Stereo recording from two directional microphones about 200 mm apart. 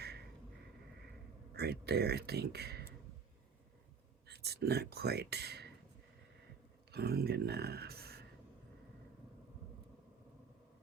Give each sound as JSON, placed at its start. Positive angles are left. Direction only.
{"t": 1.5, "sound": "speech", "side_deg": -55}
{"t": 4.3, "sound": "speech", "side_deg": -55}
{"t": 6.9, "sound": "speech", "side_deg": -50}